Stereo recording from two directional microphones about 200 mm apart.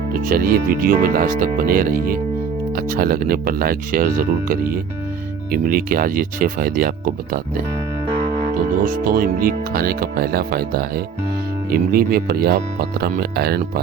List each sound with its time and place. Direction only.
0.1 s speech: 45° right (ahead or behind)
8.8 s speech: 45° right (ahead or behind)